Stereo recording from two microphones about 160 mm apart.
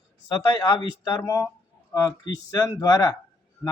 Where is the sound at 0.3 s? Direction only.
20° left (ahead or behind).